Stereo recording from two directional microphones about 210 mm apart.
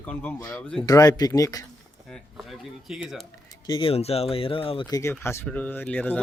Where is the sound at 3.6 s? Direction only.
25° left (ahead or behind).